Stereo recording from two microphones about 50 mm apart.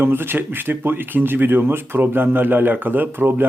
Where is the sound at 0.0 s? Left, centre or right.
Right.